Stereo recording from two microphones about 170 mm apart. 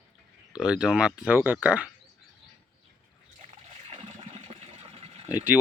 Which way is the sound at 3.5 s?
35° right (ahead or behind).